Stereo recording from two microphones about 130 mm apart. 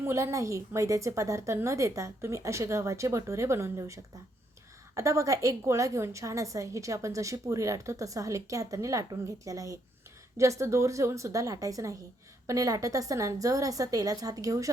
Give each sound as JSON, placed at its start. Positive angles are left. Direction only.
{"t": 0.0, "sound": "a woman's voice", "side_deg": -20}